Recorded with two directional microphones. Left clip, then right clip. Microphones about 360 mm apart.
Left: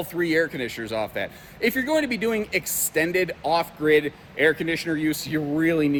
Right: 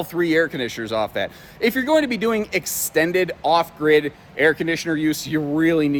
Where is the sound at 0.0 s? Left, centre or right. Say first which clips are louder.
Right 4 dB; centre.